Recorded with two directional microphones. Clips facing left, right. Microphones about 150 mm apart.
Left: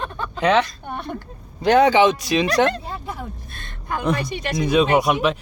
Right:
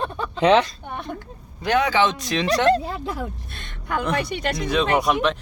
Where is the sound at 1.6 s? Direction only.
35° left (ahead or behind).